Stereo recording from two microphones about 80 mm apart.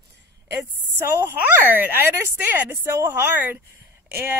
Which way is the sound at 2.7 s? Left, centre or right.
Right.